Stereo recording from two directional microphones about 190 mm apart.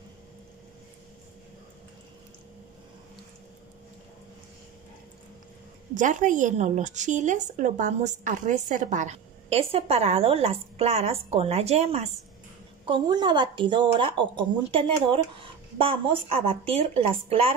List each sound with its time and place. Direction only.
5.9 s a woman's voice: 40° right (ahead or behind)